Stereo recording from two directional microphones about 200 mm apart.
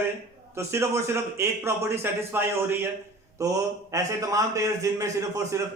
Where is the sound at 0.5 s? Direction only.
15° right (ahead or behind).